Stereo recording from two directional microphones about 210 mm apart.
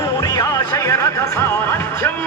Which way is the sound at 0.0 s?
15° left (ahead or behind).